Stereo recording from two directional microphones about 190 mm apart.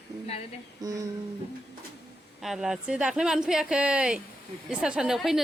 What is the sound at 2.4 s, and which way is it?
Speech, centre (ahead or behind).